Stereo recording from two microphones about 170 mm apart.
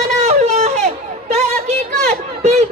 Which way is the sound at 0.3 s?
40° right (ahead or behind).